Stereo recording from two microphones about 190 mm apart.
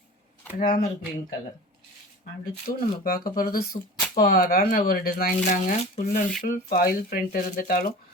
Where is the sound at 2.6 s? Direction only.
50° left (ahead or behind).